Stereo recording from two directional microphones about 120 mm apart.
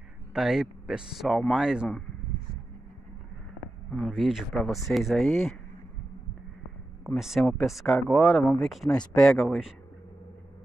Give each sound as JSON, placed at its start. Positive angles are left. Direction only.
{"t": 0.3, "sound": "speech", "side_deg": -5}
{"t": 3.9, "sound": "speech", "side_deg": 0}
{"t": 7.2, "sound": "speech", "side_deg": -5}